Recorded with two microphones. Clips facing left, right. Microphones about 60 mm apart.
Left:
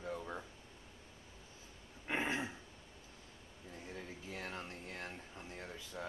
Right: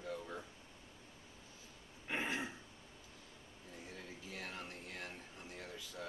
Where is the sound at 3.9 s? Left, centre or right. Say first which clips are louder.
Left 3 dB; centre.